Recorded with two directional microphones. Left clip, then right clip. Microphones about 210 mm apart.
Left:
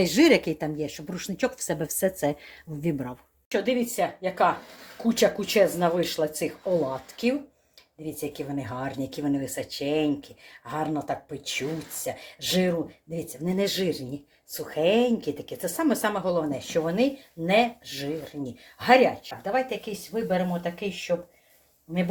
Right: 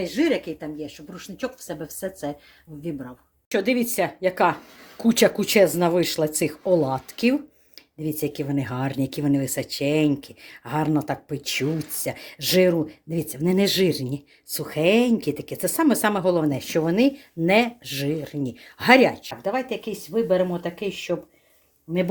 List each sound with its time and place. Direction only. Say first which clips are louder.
0.0 s speech: left 3 dB; 40° left (ahead or behind); by 3.2 s 20° left (ahead or behind)
3.5 s speech: right 3 dB; 40° right (ahead or behind)